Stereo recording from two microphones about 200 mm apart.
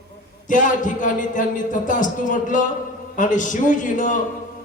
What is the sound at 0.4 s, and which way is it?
A man's voice, 40° left (ahead or behind).